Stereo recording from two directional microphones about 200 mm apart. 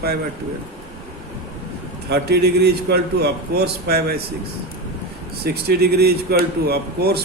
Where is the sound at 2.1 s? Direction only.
55° right (ahead or behind).